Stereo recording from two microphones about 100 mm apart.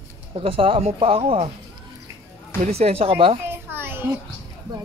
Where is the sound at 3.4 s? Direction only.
20° right (ahead or behind).